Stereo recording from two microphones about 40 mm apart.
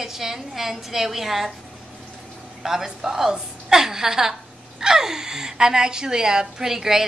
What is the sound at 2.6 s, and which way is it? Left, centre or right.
A woman's voice, centre.